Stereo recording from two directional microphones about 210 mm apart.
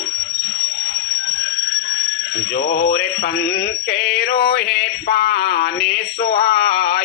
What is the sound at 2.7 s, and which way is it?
Synthetic singing, 50° left (ahead or behind).